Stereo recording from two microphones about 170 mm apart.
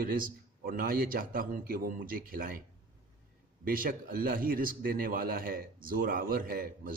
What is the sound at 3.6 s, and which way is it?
Speech, 55° right (ahead or behind).